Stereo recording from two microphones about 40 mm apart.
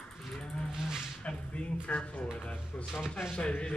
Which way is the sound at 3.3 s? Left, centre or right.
Left.